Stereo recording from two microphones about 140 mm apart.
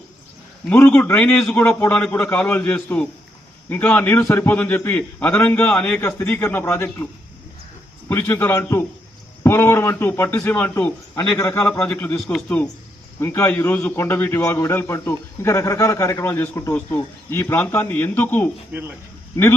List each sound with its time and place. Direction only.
0.7 s a man's voice: 10° left (ahead or behind)
8.1 s a man's voice: 15° left (ahead or behind)
13.1 s a man's voice: 15° left (ahead or behind)
18.7 s speech: 10° right (ahead or behind)